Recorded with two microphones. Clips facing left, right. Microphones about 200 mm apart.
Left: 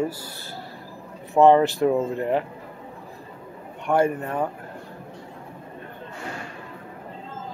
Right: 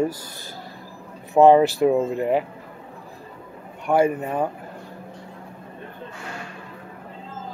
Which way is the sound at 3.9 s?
10° right (ahead or behind).